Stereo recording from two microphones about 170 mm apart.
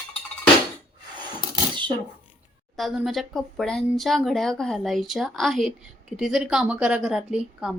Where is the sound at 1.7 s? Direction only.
30° right (ahead or behind).